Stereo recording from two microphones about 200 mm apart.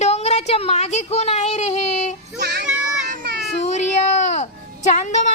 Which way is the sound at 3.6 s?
35° left (ahead or behind).